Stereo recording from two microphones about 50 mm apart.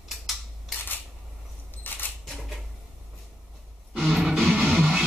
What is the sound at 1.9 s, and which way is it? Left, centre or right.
Camera, left.